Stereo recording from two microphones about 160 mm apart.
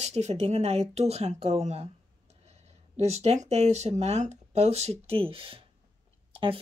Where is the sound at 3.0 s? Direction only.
40° right (ahead or behind).